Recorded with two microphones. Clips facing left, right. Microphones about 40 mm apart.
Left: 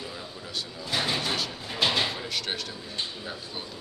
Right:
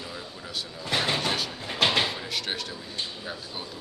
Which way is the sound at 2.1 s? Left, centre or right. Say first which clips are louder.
Even; centre.